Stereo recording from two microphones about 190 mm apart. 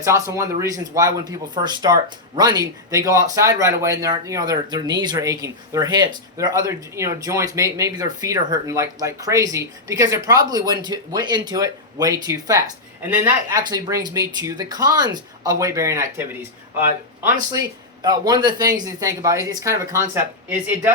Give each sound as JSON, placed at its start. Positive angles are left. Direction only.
{"t": 0.0, "sound": "speech", "side_deg": -15}
{"t": 13.6, "sound": "speech", "side_deg": -20}